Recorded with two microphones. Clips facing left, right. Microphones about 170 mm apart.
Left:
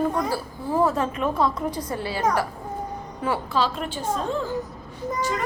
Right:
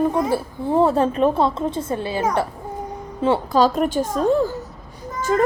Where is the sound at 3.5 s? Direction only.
45° right (ahead or behind).